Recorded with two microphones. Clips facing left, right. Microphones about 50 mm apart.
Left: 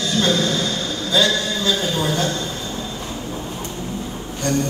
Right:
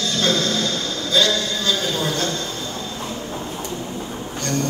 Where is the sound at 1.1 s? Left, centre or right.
Centre.